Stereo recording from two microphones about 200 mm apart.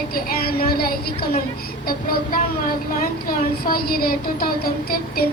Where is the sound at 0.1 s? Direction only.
50° left (ahead or behind).